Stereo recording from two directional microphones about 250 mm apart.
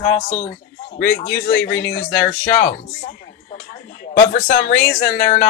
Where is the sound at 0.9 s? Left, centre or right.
Left.